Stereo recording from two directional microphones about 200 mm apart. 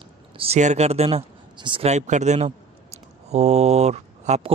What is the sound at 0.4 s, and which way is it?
Speech, 35° right (ahead or behind).